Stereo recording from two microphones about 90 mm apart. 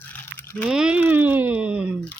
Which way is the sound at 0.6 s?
10° right (ahead or behind).